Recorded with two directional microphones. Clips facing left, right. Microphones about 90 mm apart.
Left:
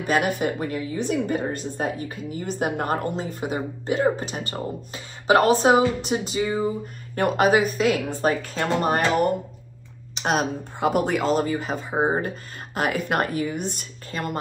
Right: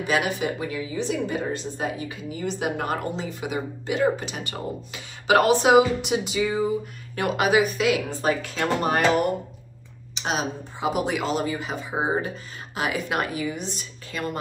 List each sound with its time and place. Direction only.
0.0 s a woman's voice: 45° left (ahead or behind)
10.1 s speech: 50° left (ahead or behind)
11.9 s speech: centre (ahead or behind)
12.7 s speech: 45° left (ahead or behind)